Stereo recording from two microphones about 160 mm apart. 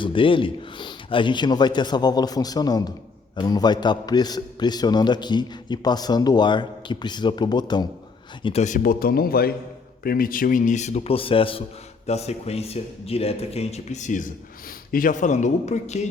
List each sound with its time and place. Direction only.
0.0 s a man's voice: 30° left (ahead or behind)
8.4 s speech: 45° left (ahead or behind)